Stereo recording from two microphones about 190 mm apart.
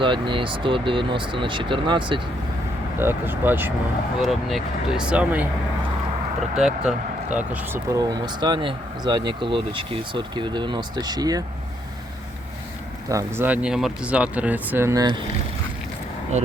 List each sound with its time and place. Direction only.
0.0 s speech: 25° right (ahead or behind)
3.0 s speech: 10° right (ahead or behind)
6.6 s speech: 5° right (ahead or behind); by 11.4 s 20° right (ahead or behind)
13.1 s speech: 15° right (ahead or behind)